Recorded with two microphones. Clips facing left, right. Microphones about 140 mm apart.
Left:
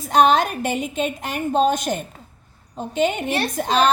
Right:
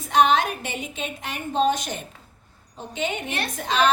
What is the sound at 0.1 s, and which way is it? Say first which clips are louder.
A woman's voice: left 3 dB; 40° left (ahead or behind).